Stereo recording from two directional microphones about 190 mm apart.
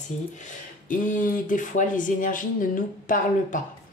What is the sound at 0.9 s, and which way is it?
Speech, 45° left (ahead or behind).